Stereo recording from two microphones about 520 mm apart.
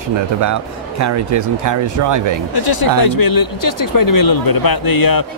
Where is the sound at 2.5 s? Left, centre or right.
Left.